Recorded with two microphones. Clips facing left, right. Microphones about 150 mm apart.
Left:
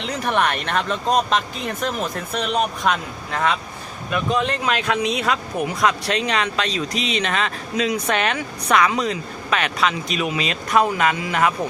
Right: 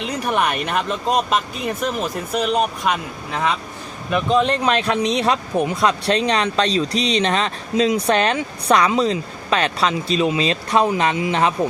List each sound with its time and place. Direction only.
0.3 s speech: 10° right (ahead or behind)
4.1 s speech: 25° right (ahead or behind)